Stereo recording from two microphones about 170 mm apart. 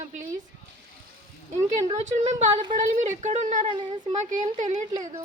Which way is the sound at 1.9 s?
40° right (ahead or behind).